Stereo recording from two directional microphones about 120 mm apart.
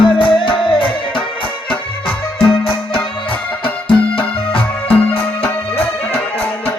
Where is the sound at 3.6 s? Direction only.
45° left (ahead or behind).